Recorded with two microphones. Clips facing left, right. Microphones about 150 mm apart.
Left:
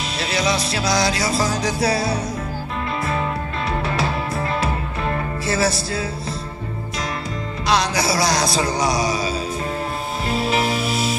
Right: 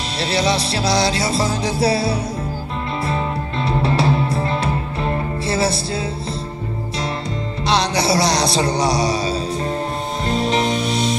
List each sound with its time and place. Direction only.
0.2 s music: 30° right (ahead or behind)
3.6 s music: 30° right (ahead or behind)
7.6 s a man's voice: 30° right (ahead or behind)
10.2 s music: 5° left (ahead or behind)